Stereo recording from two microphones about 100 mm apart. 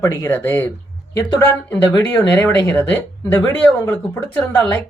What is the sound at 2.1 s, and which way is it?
Speech, 20° left (ahead or behind).